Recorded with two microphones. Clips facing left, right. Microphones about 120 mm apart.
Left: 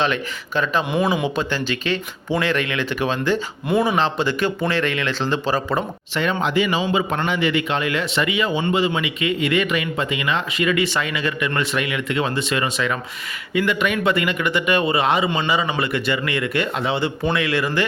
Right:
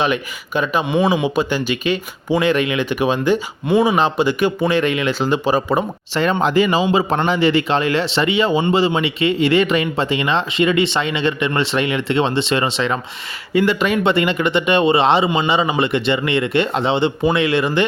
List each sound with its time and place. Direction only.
0.0 s speech: 15° right (ahead or behind)
0.9 s speech: centre (ahead or behind)
3.7 s speech: centre (ahead or behind)
3.9 s speech: 15° right (ahead or behind)
6.1 s speech: 40° right (ahead or behind)